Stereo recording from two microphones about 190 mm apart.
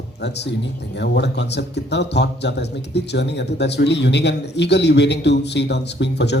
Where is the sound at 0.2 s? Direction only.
60° left (ahead or behind).